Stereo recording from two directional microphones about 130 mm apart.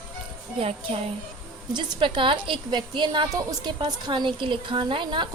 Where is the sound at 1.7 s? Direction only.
40° right (ahead or behind).